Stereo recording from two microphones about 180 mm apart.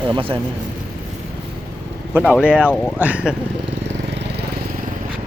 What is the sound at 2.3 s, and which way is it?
Speech, 5° right (ahead or behind).